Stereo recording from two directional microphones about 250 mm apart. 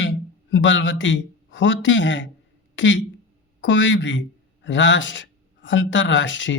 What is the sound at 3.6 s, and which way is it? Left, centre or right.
A man's voice, left.